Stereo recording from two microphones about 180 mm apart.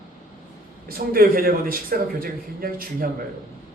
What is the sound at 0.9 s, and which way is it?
A man's voice, 55° right (ahead or behind).